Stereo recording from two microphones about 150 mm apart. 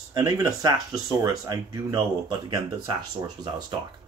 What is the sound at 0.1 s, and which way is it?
Speech, 25° right (ahead or behind).